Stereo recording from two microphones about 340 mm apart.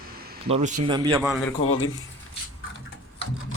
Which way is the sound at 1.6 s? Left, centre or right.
Left.